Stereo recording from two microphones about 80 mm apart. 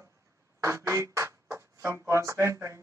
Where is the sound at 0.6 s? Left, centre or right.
Right.